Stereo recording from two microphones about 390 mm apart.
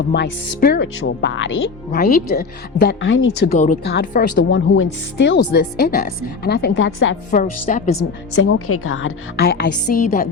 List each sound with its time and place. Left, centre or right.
0.1 s a woman's voice: left
8.4 s a woman's voice: left